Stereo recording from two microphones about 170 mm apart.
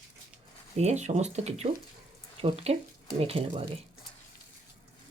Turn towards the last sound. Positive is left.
turn(degrees=-35)  # may be behind; listen again after turning